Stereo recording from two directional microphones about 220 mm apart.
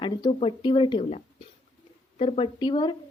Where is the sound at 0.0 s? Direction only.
20° left (ahead or behind).